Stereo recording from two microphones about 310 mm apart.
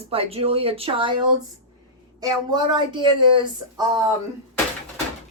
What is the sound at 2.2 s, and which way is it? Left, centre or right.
Speech, centre.